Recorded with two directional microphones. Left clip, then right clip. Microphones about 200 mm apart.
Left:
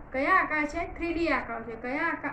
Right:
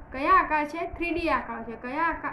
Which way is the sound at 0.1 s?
60° right (ahead or behind).